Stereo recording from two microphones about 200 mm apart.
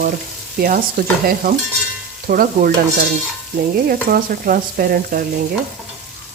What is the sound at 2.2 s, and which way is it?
Stir, 45° right (ahead or behind).